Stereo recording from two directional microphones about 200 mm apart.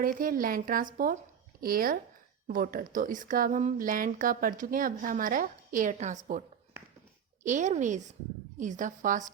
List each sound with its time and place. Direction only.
0.0 s a woman's voice: 45° right (ahead or behind)
7.4 s a woman's voice: 40° right (ahead or behind)